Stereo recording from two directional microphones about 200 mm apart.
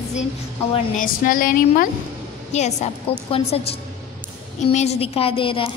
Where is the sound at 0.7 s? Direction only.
40° left (ahead or behind).